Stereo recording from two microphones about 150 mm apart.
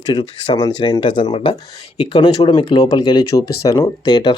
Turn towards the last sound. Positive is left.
turn(degrees=30)  # may be behind; listen again after turning